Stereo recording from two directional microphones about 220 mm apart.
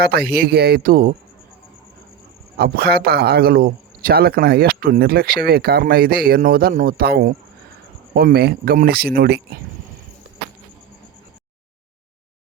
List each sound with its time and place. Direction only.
0.0 s speech: 45° right (ahead or behind)
2.6 s speech: 45° right (ahead or behind)